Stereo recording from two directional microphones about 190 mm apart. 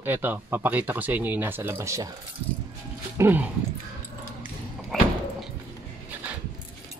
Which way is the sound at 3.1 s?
10° right (ahead or behind).